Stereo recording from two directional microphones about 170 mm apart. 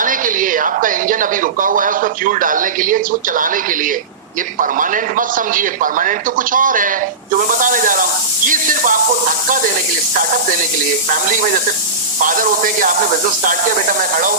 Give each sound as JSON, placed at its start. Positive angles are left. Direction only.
{"t": 0.0, "sound": "speech", "side_deg": -50}